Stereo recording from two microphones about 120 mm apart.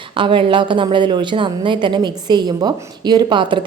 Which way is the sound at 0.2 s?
45° right (ahead or behind).